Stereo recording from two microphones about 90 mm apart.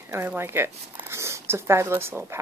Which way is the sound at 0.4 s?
25° right (ahead or behind).